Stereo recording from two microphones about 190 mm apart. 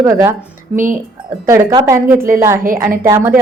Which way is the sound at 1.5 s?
15° right (ahead or behind).